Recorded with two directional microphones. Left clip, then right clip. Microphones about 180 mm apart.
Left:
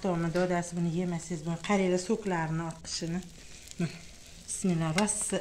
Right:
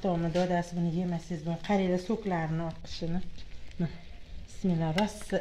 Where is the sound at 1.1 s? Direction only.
10° right (ahead or behind).